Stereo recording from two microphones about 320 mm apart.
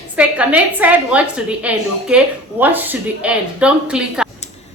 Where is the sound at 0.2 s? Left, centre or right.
Centre.